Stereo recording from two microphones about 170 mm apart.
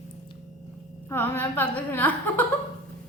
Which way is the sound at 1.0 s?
10° left (ahead or behind).